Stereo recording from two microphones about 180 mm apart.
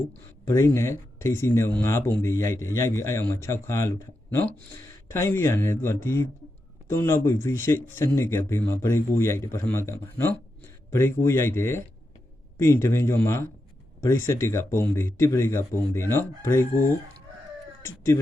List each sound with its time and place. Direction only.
0.4 s speech: 15° left (ahead or behind)